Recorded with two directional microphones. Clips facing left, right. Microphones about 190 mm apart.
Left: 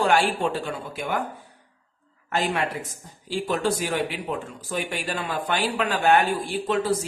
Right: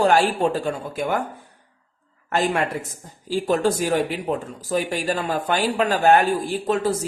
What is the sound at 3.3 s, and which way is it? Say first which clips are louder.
Speech: right 4 dB; 40° right (ahead or behind).